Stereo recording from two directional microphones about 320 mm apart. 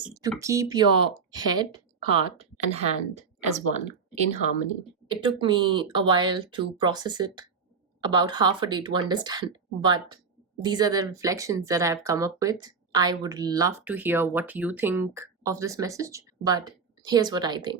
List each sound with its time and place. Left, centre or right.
0.1 s a woman's voice: centre